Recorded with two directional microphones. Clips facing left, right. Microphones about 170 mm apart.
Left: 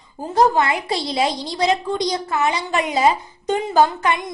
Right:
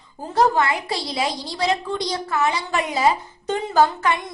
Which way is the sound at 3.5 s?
15° left (ahead or behind).